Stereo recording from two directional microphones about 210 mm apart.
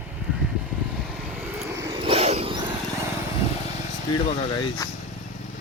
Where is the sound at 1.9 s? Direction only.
25° right (ahead or behind).